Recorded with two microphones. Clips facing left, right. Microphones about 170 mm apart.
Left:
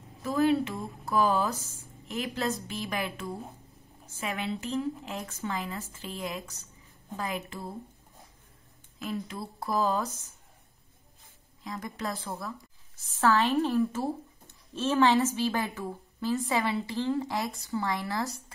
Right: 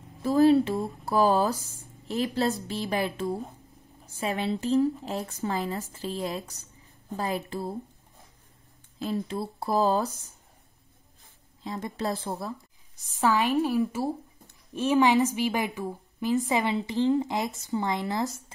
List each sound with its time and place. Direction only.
0.2 s speech: 35° right (ahead or behind)
9.0 s speech: 30° right (ahead or behind)
11.6 s a woman's voice: 30° right (ahead or behind)
13.2 s a woman's voice: 15° right (ahead or behind)